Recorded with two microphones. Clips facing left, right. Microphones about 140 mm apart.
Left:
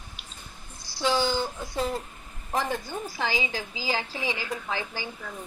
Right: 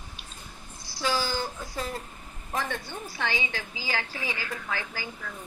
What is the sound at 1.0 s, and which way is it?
Speech, 20° left (ahead or behind).